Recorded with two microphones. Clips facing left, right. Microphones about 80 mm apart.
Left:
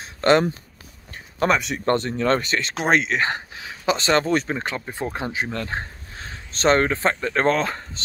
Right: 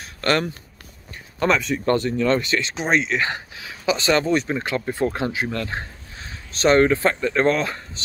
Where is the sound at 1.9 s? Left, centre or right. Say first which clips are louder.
Even; left.